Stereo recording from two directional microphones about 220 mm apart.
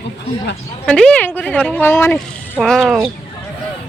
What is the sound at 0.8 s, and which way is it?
A woman's voice, 5° left (ahead or behind).